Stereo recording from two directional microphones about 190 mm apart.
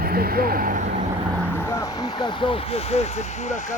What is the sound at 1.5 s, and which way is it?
Speech, 15° left (ahead or behind).